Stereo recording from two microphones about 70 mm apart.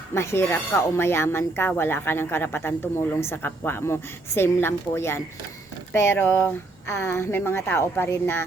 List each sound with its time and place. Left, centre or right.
0.1 s speech: left